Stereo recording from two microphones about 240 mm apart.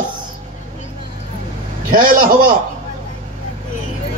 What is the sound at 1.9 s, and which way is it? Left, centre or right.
Speech, right.